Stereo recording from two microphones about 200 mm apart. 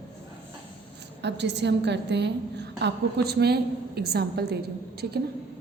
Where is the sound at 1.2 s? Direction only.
60° right (ahead or behind).